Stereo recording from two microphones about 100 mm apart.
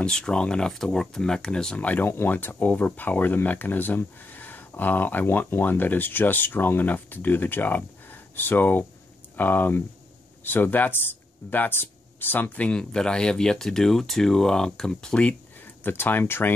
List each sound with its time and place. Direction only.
0.0 s speech: 10° left (ahead or behind)
15.8 s speech: 20° left (ahead or behind)